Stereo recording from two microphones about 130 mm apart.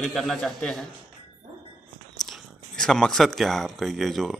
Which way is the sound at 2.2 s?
Centre (ahead or behind).